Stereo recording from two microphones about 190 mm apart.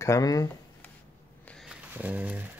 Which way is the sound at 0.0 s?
15° left (ahead or behind).